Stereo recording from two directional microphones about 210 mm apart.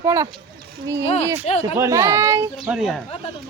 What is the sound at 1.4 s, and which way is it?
Speech, 30° left (ahead or behind).